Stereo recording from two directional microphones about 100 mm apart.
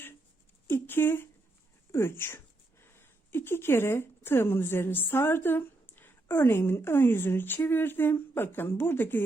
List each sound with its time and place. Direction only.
0.7 s speech: 20° left (ahead or behind)